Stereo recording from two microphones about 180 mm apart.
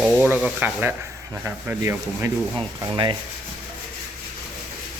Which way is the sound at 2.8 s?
25° right (ahead or behind).